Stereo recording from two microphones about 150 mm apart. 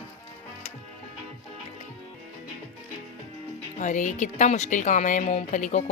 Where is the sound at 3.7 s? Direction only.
55° left (ahead or behind).